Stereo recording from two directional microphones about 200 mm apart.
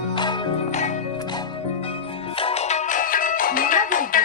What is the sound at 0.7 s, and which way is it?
Music, 35° left (ahead or behind).